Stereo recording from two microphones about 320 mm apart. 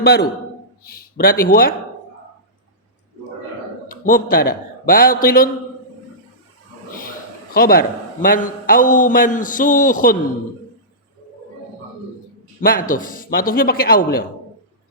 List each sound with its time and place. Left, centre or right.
0.0 s a man's voice: left
3.8 s a man's voice: left
7.5 s a man's voice: left
12.5 s a man's voice: left